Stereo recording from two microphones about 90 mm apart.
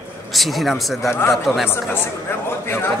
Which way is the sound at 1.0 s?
25° left (ahead or behind).